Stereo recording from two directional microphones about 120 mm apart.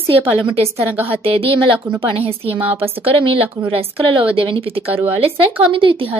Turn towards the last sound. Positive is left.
turn(degrees=-45)  # may be behind; listen again after turning